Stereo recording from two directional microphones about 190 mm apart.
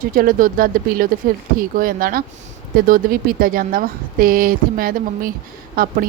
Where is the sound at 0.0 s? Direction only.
45° right (ahead or behind).